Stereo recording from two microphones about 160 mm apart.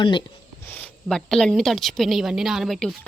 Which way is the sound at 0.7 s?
5° left (ahead or behind).